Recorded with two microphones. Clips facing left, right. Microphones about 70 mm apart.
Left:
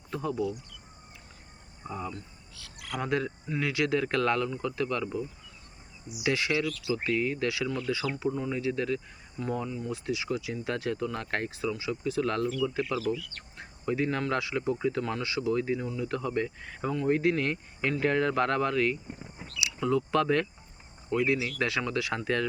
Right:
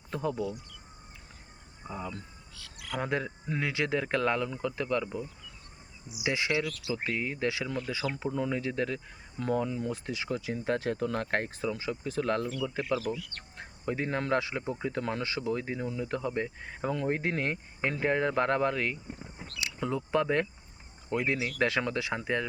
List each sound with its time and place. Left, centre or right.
0.1 s speech: right
3.0 s speech: right
6.2 s speech: right
8.4 s speech: right
9.4 s speech: right
9.9 s speech: right
16.9 s speech: right
17.2 s speech: right
21.1 s speech: right
22.0 s speech: right